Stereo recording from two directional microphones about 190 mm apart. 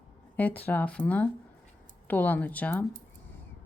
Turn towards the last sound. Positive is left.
turn(degrees=10)  # may be behind; listen again after turning